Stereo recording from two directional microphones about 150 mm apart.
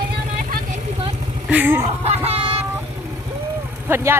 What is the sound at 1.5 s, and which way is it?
Speech, 10° right (ahead or behind).